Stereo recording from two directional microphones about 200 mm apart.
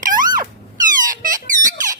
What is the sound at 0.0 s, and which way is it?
Music, 40° right (ahead or behind).